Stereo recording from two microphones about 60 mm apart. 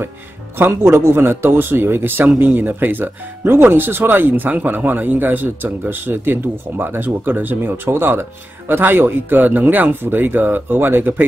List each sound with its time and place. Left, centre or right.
0.6 s speech: right